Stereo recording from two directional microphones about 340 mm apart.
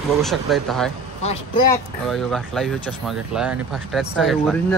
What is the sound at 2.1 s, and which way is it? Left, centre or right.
Speech, centre.